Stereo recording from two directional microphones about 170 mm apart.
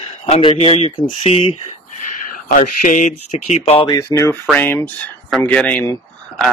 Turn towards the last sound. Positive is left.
turn(degrees=5)  # may be behind; listen again after turning